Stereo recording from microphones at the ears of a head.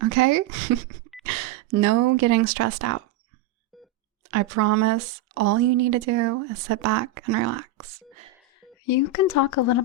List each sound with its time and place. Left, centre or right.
0.0 s speech: right
4.2 s speech: right
8.8 s speech: left